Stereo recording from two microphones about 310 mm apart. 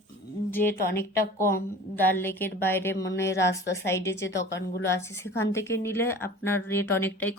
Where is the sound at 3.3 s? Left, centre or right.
Left.